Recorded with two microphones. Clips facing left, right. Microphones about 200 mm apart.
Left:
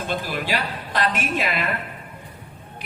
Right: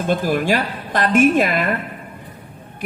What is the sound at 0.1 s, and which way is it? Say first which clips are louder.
A woman's voice: right 9 dB; 45° right (ahead or behind).